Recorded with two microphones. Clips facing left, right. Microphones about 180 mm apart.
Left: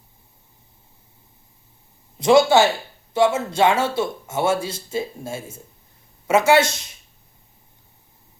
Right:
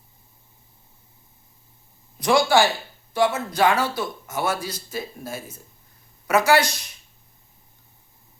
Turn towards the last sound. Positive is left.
turn(degrees=25)  # may be behind; listen again after turning